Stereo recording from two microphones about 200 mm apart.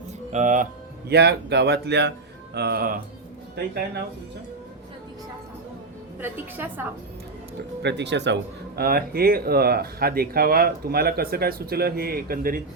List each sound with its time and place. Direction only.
0.3 s speech: 40° right (ahead or behind)
6.1 s a woman's voice: 10° right (ahead or behind)
7.8 s speech: 60° right (ahead or behind)